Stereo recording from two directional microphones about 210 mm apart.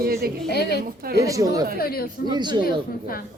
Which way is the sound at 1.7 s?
45° left (ahead or behind).